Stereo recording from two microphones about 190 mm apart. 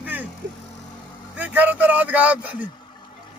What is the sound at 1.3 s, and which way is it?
A man's voice, 10° right (ahead or behind).